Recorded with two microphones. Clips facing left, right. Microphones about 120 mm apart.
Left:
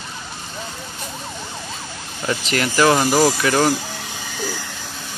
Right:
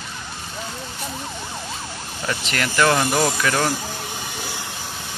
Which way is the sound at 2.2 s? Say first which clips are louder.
Left 4 dB; 20° left (ahead or behind).